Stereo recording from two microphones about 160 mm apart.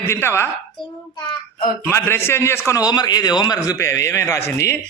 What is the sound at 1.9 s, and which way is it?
A man's voice, 15° left (ahead or behind).